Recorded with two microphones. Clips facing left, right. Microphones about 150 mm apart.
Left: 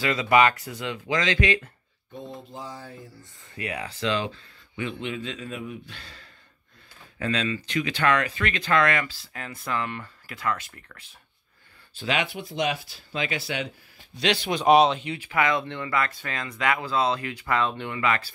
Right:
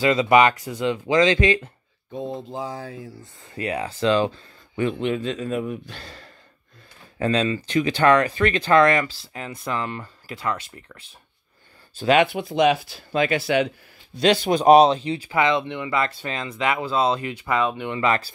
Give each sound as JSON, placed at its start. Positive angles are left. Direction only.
{"t": 0.0, "sound": "speech", "side_deg": -25}
{"t": 2.1, "sound": "mantra", "side_deg": -90}
{"t": 3.5, "sound": "speech", "side_deg": -35}
{"t": 9.3, "sound": "speech", "side_deg": -20}
{"t": 11.9, "sound": "speech", "side_deg": -40}
{"t": 12.2, "sound": "speech", "side_deg": -65}
{"t": 14.2, "sound": "speech", "side_deg": -40}
{"t": 17.9, "sound": "speech", "side_deg": -35}